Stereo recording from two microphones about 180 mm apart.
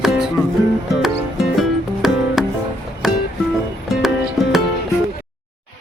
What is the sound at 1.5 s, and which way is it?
Music, centre (ahead or behind).